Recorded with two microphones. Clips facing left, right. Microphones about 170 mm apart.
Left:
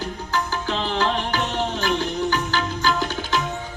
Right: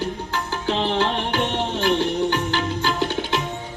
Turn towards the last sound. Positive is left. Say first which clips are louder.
# right 1 dB
turn(degrees=-30)  # may be behind; listen again after turning